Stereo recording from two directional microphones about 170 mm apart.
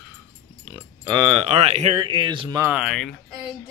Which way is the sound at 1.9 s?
25° right (ahead or behind).